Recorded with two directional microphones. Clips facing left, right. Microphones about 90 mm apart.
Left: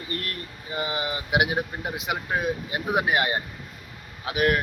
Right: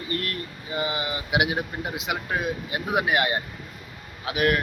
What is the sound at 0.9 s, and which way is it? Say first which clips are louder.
Speech: left 3 dB; 35° left (ahead or behind).